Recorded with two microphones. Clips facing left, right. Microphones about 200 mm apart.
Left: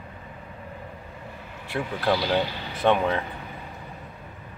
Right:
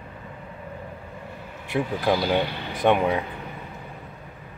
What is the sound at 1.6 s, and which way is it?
Speech, 15° right (ahead or behind).